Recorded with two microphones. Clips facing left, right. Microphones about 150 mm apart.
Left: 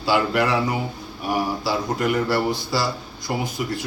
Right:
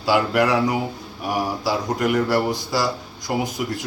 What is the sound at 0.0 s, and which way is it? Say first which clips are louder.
Speech: right 2 dB; 15° right (ahead or behind).